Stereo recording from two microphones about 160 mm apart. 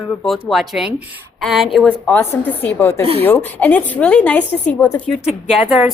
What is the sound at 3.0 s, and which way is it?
Speech, 40° right (ahead or behind).